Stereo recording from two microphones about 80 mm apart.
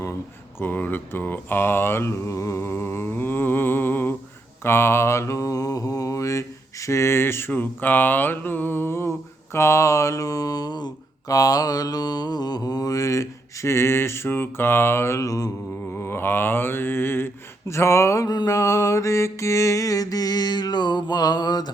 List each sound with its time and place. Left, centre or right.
0.6 s mantra: left
11.3 s mantra: left
15.9 s mantra: left
18.3 s mantra: left